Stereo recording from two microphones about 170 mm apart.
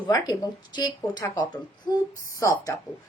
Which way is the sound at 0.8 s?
25° left (ahead or behind).